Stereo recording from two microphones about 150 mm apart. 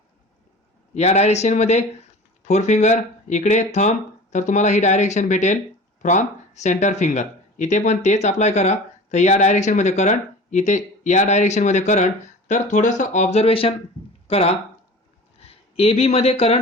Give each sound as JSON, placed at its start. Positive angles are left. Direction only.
{"t": 0.9, "sound": "speech", "side_deg": 45}